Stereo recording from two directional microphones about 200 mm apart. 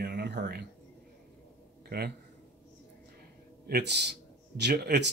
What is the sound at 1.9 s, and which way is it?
Speech, 55° right (ahead or behind).